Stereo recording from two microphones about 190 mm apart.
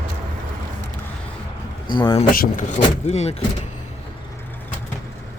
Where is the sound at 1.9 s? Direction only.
25° left (ahead or behind).